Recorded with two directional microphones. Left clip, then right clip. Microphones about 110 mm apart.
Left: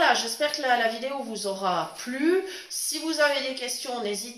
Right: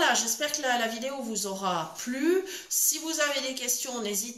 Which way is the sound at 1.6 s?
40° left (ahead or behind).